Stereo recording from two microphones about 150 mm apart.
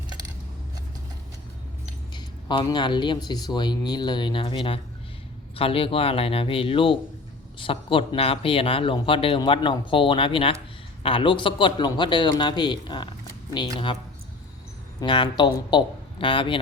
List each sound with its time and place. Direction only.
2.1 s speech: 30° left (ahead or behind)
15.0 s speech: 30° left (ahead or behind)